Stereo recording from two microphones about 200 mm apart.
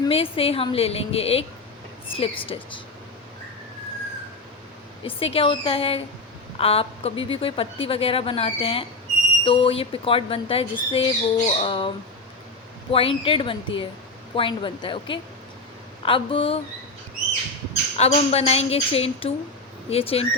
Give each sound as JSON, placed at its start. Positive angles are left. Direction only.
{"t": 0.0, "sound": "speech", "side_deg": 30}
{"t": 5.0, "sound": "speech", "side_deg": 30}
{"t": 12.9, "sound": "speech", "side_deg": 25}
{"t": 17.9, "sound": "a woman's voice", "side_deg": 30}